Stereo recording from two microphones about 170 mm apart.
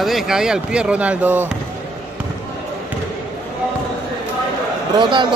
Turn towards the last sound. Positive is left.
turn(degrees=-30)  # may be behind; listen again after turning